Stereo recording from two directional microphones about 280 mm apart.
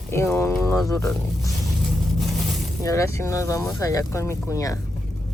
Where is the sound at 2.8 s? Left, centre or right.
Centre.